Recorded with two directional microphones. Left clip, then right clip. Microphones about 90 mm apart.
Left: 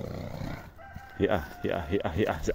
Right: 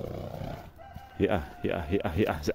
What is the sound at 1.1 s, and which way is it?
Speech, 60° right (ahead or behind).